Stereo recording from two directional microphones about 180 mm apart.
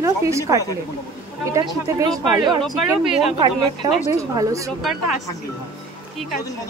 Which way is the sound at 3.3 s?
25° right (ahead or behind).